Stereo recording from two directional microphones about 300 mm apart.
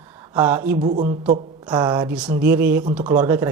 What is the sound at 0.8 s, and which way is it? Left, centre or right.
A man's voice, right.